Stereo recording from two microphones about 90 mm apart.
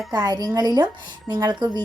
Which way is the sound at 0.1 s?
50° right (ahead or behind).